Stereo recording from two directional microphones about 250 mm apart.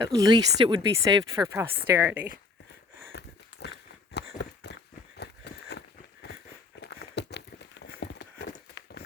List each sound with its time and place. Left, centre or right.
0.2 s speech: centre
3.1 s a sound: left
6.7 s clip-clop: left